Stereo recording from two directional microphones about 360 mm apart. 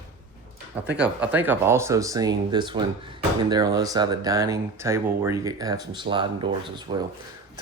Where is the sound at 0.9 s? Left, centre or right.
Centre.